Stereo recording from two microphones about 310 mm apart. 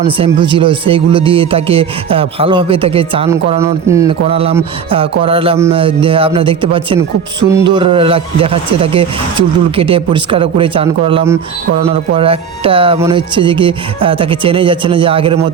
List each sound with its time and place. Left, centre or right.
0.0 s speech: centre